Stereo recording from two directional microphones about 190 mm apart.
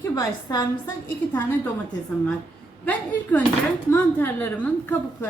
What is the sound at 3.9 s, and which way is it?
A woman's voice, 10° left (ahead or behind).